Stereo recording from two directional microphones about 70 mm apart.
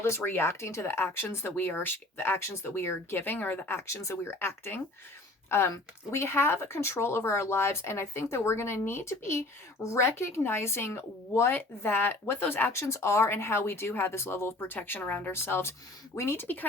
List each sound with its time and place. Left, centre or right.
0.0 s speech: left
15.3 s speech: left